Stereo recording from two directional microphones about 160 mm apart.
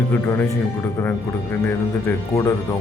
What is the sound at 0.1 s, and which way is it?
Speech, 10° left (ahead or behind).